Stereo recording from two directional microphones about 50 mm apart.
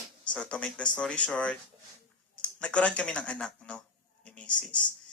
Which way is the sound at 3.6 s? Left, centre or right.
Left.